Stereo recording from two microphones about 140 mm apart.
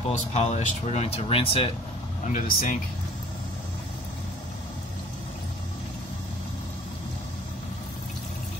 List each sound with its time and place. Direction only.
0.1 s speech: 55° left (ahead or behind)
2.2 s speech: 85° left